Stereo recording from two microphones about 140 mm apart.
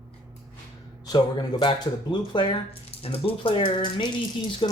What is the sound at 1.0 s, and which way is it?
Speech, 30° left (ahead or behind).